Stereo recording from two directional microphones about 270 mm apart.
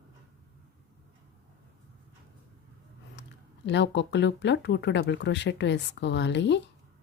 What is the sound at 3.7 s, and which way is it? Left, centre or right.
Speech, left.